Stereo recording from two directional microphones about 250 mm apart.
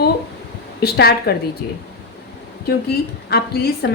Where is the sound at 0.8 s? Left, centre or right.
Left.